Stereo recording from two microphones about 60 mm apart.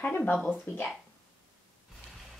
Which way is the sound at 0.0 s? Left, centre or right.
Left.